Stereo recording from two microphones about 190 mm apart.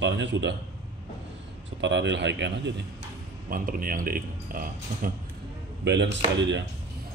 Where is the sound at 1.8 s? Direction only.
70° right (ahead or behind).